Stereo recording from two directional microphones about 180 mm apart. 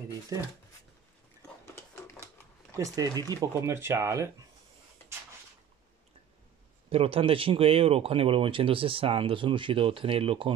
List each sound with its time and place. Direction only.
2.7 s speech: 20° right (ahead or behind)
6.9 s speech: 30° right (ahead or behind)